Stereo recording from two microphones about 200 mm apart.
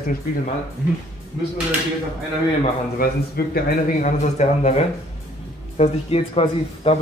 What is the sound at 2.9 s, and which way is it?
A man's voice, 50° left (ahead or behind).